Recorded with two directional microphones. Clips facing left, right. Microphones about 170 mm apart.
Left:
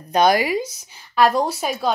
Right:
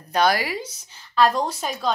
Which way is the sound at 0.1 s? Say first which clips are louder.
Left 4 dB; 20° left (ahead or behind).